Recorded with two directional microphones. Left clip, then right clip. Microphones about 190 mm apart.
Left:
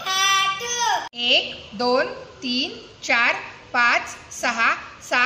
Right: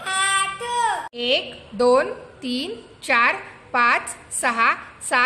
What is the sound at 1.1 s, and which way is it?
A woman's voice, 65° right (ahead or behind).